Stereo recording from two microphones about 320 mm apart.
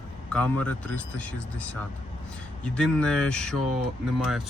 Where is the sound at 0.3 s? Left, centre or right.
Centre.